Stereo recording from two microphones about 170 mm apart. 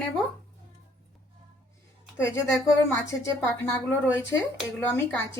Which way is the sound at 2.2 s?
15° left (ahead or behind).